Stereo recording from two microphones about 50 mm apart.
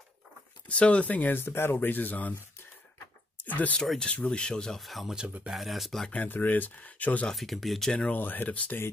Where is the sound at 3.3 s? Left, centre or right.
Left.